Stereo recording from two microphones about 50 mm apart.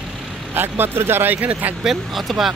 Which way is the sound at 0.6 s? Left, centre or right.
Right.